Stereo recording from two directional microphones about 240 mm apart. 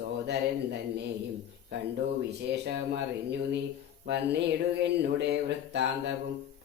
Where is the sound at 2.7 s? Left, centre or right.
Right.